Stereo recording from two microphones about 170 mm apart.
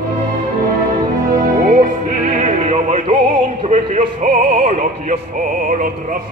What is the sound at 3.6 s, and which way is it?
Opera, 45° right (ahead or behind).